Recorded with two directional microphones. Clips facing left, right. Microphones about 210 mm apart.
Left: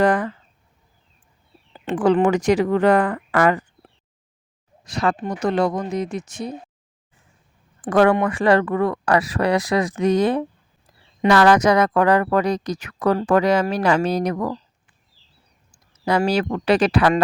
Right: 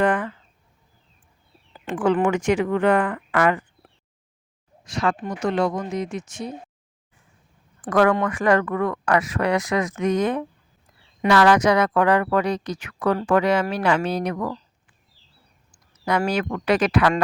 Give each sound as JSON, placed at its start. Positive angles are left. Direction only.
{"t": 0.0, "sound": "speech", "side_deg": 40}
{"t": 1.7, "sound": "a sound", "side_deg": 25}
{"t": 2.0, "sound": "speech", "side_deg": 35}
{"t": 4.9, "sound": "speech", "side_deg": 35}
{"t": 7.8, "sound": "speech", "side_deg": 30}
{"t": 11.3, "sound": "speech", "side_deg": 45}
{"t": 16.0, "sound": "speech", "side_deg": 30}